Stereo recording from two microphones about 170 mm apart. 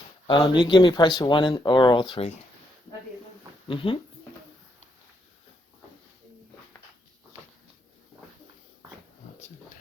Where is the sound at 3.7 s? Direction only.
30° left (ahead or behind).